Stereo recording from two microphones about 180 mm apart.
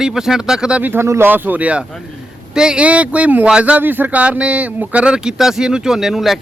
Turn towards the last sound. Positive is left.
turn(degrees=0)  # may be behind; listen again after turning